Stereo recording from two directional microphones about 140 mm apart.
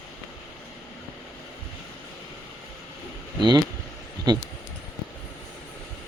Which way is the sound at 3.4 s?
30° right (ahead or behind).